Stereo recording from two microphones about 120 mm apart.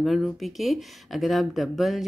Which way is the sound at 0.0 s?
Centre (ahead or behind).